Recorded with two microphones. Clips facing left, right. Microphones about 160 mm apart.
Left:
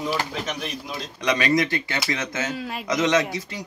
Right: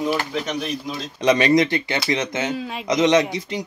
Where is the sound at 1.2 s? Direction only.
25° right (ahead or behind).